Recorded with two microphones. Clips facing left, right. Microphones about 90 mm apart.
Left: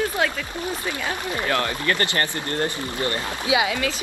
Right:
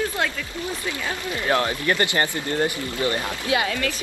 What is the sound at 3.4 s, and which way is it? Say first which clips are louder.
Speech: left 2 dB; 10° left (ahead or behind).